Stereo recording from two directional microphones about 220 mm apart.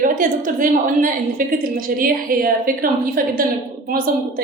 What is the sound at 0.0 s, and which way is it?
A woman's voice, 35° right (ahead or behind).